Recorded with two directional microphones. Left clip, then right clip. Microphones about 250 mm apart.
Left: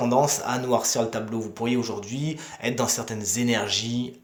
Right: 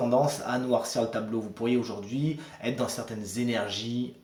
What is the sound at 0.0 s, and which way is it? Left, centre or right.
Speech, left.